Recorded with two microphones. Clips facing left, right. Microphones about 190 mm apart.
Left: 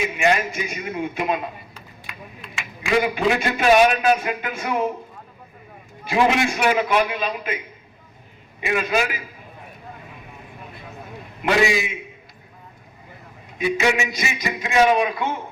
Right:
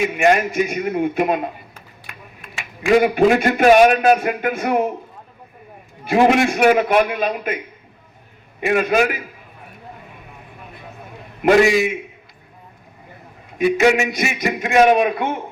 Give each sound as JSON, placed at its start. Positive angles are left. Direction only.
{"t": 0.0, "sound": "a man's voice", "side_deg": -50}
{"t": 6.1, "sound": "a man's voice", "side_deg": -50}
{"t": 8.6, "sound": "a man's voice", "side_deg": -50}
{"t": 11.4, "sound": "a man's voice", "side_deg": -55}
{"t": 13.6, "sound": "speech", "side_deg": -50}